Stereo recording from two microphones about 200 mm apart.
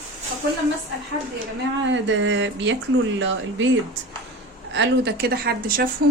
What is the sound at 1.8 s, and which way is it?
A woman's voice, 70° right (ahead or behind).